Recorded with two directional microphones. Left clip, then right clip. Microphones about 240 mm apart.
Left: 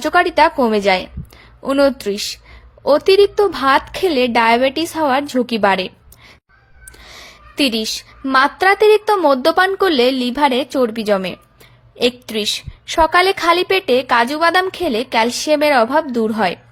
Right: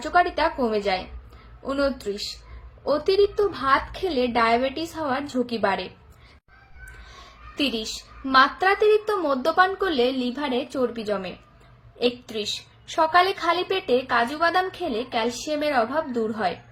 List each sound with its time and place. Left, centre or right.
0.0 s a woman's voice: left
7.5 s a woman's voice: left